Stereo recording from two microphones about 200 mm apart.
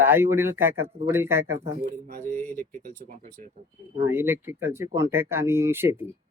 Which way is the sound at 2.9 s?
45° right (ahead or behind).